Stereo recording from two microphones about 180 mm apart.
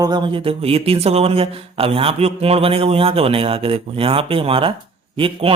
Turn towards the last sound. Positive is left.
turn(degrees=-30)  # may be behind; listen again after turning